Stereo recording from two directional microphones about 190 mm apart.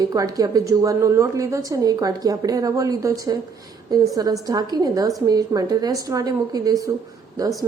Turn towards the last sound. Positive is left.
turn(degrees=-20)  # may be behind; listen again after turning